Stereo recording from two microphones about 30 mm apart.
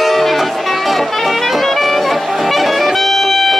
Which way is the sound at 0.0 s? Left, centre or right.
Centre.